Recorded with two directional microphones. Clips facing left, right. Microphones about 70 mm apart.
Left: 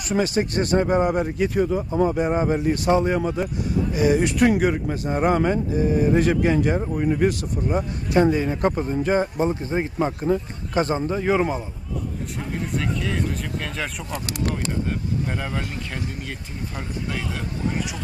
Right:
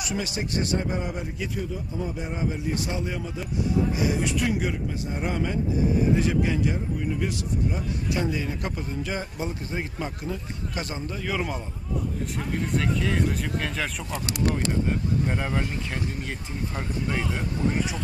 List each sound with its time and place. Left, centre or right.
0.0 s a man's voice: left
12.5 s speech: centre